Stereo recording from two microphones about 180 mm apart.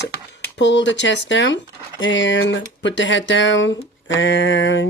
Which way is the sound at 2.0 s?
90° left.